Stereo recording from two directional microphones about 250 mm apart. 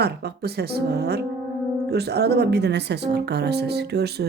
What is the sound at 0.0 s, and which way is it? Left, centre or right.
Speech, right.